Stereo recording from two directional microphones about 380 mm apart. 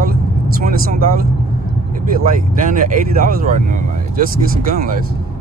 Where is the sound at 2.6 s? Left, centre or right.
Right.